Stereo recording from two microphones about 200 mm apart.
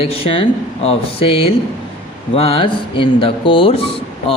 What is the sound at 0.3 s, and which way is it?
A man's voice, 30° left (ahead or behind).